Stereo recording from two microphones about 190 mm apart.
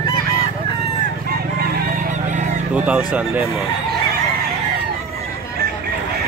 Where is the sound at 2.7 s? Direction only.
5° right (ahead or behind).